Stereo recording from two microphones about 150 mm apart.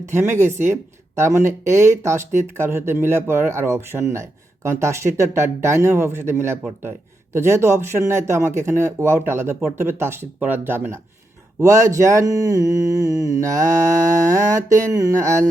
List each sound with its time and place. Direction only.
0.0 s speech: 15° right (ahead or behind)
11.6 s mantra: 20° right (ahead or behind)